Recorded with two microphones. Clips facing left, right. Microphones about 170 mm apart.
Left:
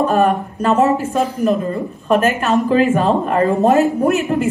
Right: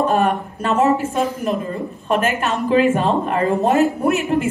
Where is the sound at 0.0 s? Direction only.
40° left (ahead or behind).